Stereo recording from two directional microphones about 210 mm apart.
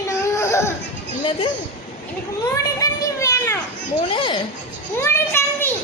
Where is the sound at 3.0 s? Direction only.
15° left (ahead or behind).